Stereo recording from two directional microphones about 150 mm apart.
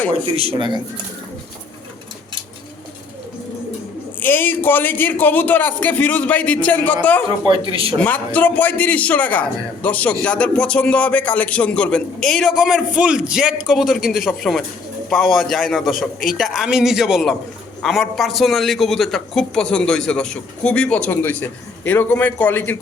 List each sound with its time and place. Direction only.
0.3 s speech: 35° right (ahead or behind)
4.2 s a man's voice: 15° left (ahead or behind)
7.3 s speech: 35° right (ahead or behind)
7.9 s a man's voice: 10° left (ahead or behind)